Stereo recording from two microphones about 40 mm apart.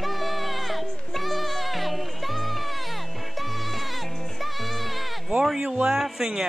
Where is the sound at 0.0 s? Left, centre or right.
Centre.